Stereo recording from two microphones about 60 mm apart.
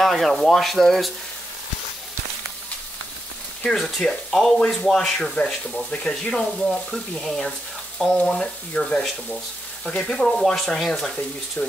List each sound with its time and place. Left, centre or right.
0.0 s speech: centre
3.6 s speech: centre
6.3 s speech: centre